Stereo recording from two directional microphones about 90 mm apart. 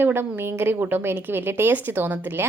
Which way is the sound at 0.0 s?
25° right (ahead or behind).